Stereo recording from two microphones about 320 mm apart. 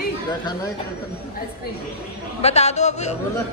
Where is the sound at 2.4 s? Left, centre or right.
Centre.